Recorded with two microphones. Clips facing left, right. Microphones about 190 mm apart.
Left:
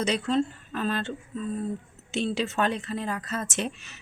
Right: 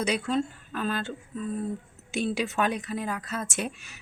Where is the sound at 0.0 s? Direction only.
10° right (ahead or behind).